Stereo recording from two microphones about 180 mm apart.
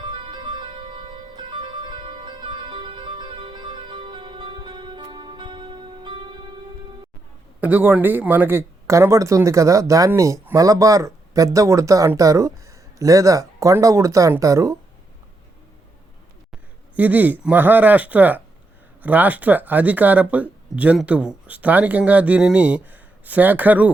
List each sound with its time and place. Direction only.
0.0 s music: 25° right (ahead or behind)
7.6 s speech: 10° right (ahead or behind)
17.0 s speech: 10° right (ahead or behind)